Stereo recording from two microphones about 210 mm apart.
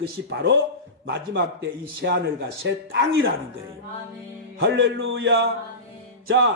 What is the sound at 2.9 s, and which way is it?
Speech, 60° right (ahead or behind).